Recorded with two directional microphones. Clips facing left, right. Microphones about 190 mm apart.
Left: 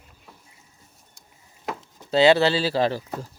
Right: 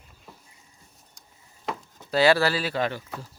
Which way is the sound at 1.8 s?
20° left (ahead or behind).